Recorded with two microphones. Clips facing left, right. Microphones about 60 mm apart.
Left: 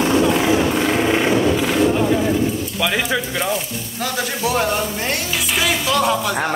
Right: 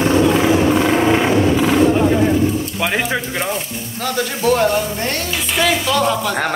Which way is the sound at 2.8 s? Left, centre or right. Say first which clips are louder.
Left 1 dB; right.